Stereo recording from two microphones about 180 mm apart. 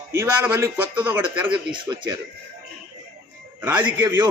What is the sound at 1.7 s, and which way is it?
Speech, 25° right (ahead or behind).